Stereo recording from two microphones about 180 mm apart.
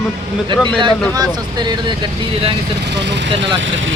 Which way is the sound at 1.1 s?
25° right (ahead or behind).